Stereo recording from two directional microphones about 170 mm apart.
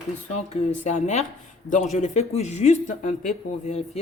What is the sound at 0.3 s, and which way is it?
Speech, 40° left (ahead or behind).